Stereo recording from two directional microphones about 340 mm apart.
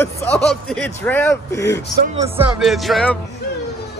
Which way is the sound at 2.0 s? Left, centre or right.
Centre.